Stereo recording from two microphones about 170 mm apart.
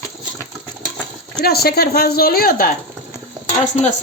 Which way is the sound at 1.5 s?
65° left (ahead or behind).